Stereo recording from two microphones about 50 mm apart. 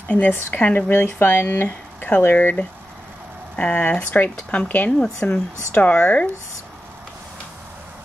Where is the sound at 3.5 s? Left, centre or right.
Left.